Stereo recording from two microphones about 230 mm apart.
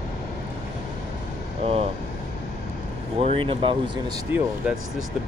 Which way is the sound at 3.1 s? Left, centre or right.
Right.